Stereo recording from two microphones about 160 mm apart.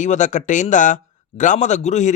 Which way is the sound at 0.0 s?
50° left (ahead or behind).